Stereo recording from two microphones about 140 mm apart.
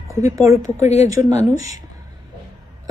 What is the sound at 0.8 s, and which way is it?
Speech, 55° left (ahead or behind).